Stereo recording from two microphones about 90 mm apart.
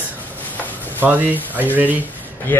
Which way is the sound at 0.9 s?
20° right (ahead or behind).